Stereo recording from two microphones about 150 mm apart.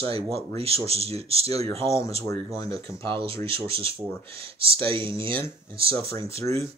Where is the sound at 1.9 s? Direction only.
20° left (ahead or behind).